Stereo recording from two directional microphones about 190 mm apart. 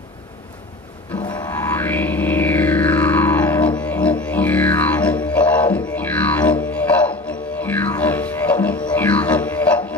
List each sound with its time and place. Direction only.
1.1 s music: 25° left (ahead or behind)
1.5 s music: 10° left (ahead or behind)